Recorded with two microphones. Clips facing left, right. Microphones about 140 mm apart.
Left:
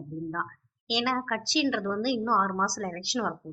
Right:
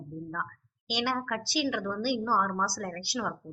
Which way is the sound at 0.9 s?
5° right (ahead or behind).